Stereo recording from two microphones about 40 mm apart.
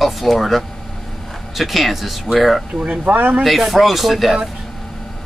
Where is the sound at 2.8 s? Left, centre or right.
Right.